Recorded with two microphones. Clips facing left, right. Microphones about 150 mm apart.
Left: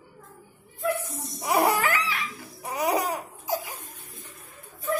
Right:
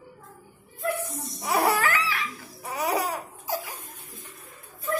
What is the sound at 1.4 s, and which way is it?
Laughter, 15° left (ahead or behind).